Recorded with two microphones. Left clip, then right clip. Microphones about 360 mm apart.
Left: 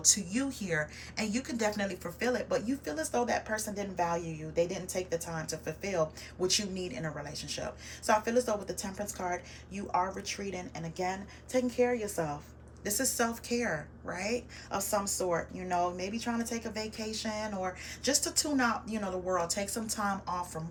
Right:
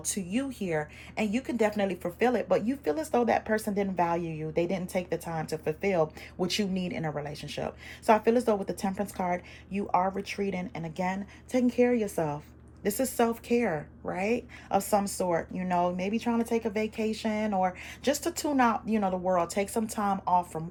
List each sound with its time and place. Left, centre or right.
0.1 s a woman's voice: centre
10.2 s a woman's voice: centre